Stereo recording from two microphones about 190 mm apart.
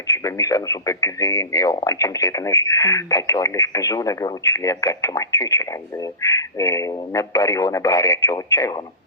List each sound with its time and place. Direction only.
0.1 s speech: 15° left (ahead or behind)